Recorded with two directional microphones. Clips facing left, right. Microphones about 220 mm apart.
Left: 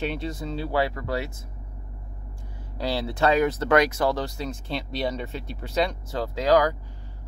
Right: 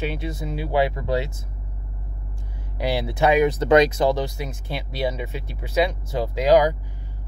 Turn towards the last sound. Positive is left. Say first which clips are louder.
# right 3 dB
turn(degrees=-15)  # may be behind; listen again after turning